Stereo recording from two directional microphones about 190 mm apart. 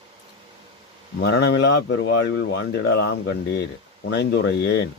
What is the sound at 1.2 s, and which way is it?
Speech, 60° left (ahead or behind).